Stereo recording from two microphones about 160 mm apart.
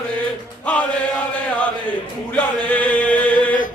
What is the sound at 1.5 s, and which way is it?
Chant, 10° left (ahead or behind).